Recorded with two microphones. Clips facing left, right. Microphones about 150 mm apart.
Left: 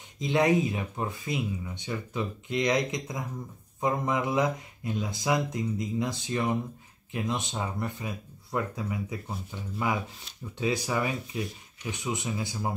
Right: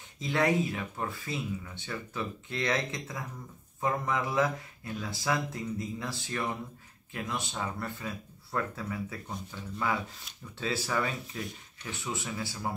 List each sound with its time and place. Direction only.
0.2 s speech: 20° left (ahead or behind)